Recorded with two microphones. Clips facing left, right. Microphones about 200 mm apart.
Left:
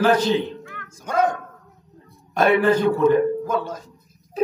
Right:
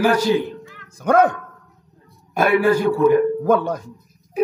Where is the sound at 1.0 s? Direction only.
60° right (ahead or behind).